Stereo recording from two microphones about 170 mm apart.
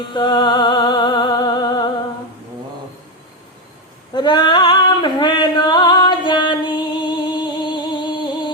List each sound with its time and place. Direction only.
0.0 s music: 25° left (ahead or behind)
4.1 s female singing: 25° left (ahead or behind)
7.0 s music: 25° left (ahead or behind)